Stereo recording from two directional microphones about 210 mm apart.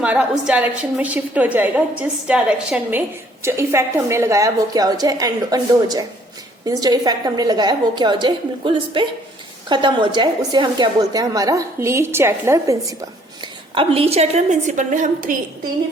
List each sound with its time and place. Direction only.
0.0 s a woman's voice: 5° right (ahead or behind)
13.4 s a woman's voice: 25° right (ahead or behind)